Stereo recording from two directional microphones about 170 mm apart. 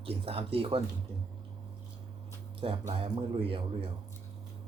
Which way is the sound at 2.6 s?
30° right (ahead or behind).